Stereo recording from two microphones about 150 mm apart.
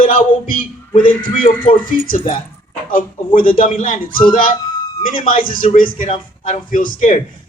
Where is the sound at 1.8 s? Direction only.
65° left (ahead or behind).